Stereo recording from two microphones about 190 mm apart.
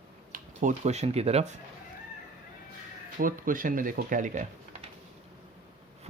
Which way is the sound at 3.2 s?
45° right (ahead or behind).